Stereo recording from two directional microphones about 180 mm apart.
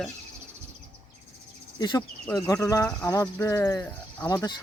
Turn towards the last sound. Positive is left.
turn(degrees=20)  # may be behind; listen again after turning